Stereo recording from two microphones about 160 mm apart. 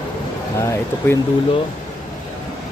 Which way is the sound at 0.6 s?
20° left (ahead or behind).